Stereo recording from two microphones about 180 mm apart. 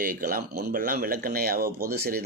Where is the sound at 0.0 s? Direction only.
50° right (ahead or behind).